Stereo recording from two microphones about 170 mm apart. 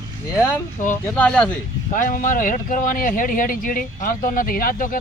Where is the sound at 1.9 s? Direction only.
50° left (ahead or behind).